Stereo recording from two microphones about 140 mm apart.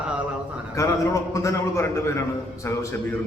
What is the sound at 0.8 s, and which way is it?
A man's voice, 20° left (ahead or behind).